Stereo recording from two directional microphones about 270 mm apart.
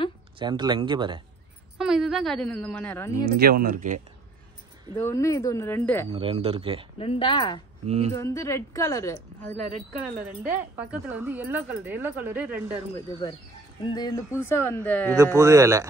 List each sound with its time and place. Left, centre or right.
0.4 s speech: centre
1.8 s a woman's voice: centre
3.3 s speech: right
4.9 s speech: centre
6.1 s speech: centre
7.0 s speech: left
7.8 s a sound: right
8.2 s speech: centre
10.2 s speech: centre
13.8 s speech: centre
15.3 s speech: centre